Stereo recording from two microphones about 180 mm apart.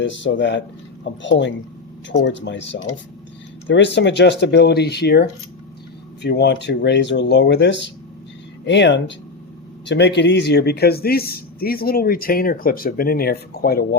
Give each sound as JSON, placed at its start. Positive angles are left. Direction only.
{"t": 0.0, "sound": "speech", "side_deg": 90}
{"t": 3.7, "sound": "speech", "side_deg": 75}